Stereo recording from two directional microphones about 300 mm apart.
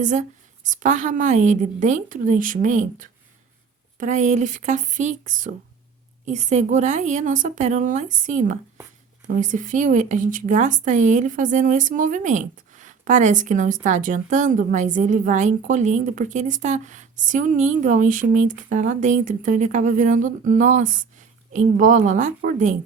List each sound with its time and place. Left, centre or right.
0.0 s speech: right